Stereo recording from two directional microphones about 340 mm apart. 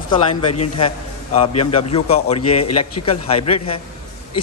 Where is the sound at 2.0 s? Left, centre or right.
Centre.